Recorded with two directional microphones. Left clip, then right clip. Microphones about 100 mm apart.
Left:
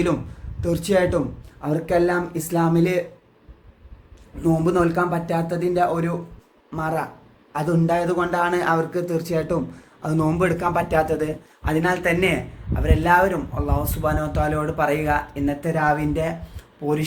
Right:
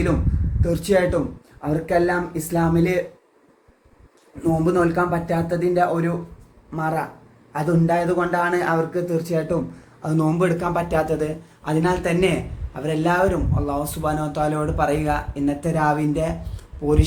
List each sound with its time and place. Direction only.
0.6 s speech: 15° left (ahead or behind)
4.4 s a man's voice: 20° left (ahead or behind)
7.7 s speech: 15° left (ahead or behind)
15.6 s speech: 5° left (ahead or behind)